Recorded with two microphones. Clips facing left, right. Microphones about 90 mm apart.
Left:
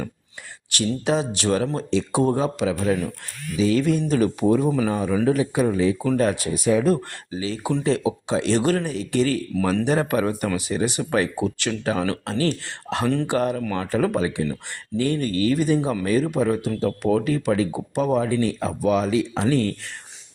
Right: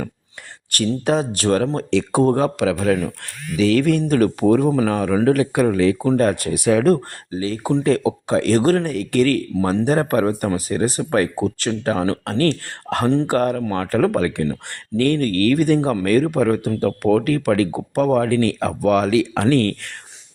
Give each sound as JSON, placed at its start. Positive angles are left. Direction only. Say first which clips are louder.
{"t": 0.7, "sound": "speech", "louder": "right 3 dB", "side_deg": -50}
{"t": 6.1, "sound": "speech", "louder": "right 3 dB", "side_deg": -50}
{"t": 6.8, "sound": "speech", "louder": "right 4 dB", "side_deg": -45}
{"t": 7.9, "sound": "speech", "louder": "right 3 dB", "side_deg": -45}
{"t": 9.8, "sound": "speech", "louder": "right 6 dB", "side_deg": -40}
{"t": 12.2, "sound": "speech", "louder": "right 4 dB", "side_deg": -55}
{"t": 18.3, "sound": "speech", "louder": "right 4 dB", "side_deg": -75}